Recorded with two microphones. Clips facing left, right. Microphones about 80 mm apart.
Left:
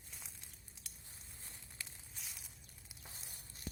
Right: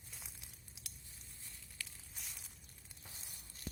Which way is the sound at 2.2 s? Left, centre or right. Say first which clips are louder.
Even; centre.